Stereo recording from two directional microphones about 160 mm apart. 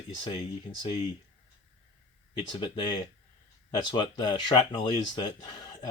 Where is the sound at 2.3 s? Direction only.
35° left (ahead or behind).